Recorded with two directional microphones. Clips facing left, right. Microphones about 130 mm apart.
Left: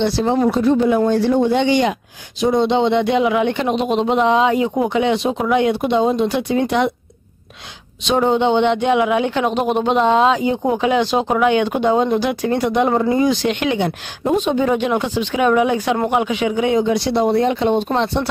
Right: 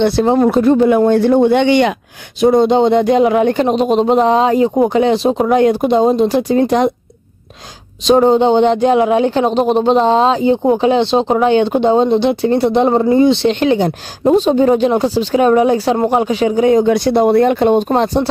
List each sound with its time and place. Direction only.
0.0 s speech: 55° right (ahead or behind)
2.4 s speech: 45° right (ahead or behind)
8.0 s speech: 35° right (ahead or behind)
16.8 s speech: 55° right (ahead or behind)